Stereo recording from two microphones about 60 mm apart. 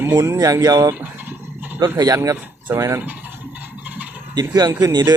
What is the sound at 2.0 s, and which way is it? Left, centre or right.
Speech, right.